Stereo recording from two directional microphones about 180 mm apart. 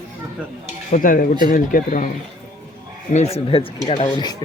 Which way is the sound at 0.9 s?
50° left (ahead or behind).